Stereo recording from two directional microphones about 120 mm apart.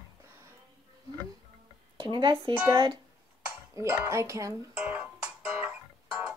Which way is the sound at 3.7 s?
20° right (ahead or behind).